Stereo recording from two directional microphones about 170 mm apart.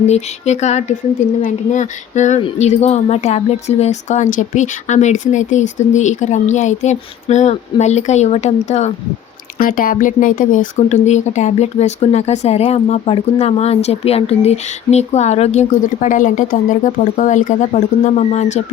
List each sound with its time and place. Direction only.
0.1 s speech: 40° left (ahead or behind)
9.6 s speech: 55° left (ahead or behind)